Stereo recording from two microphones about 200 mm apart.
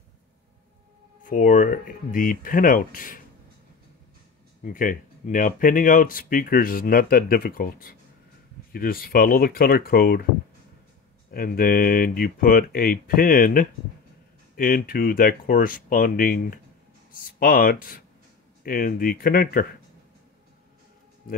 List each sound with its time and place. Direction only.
1.2 s speech: 45° left (ahead or behind)
4.6 s speech: 40° left (ahead or behind)
11.3 s speech: 45° left (ahead or behind)